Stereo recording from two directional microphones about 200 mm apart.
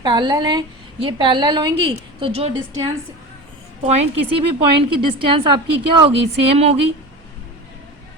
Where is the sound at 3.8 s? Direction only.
30° right (ahead or behind).